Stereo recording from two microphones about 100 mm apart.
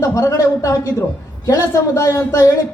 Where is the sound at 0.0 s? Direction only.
30° left (ahead or behind).